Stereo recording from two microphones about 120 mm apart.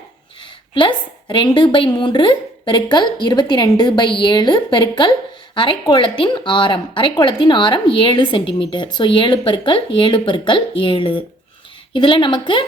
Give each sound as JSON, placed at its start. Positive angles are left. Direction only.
{"t": 0.7, "sound": "a woman's voice", "side_deg": 40}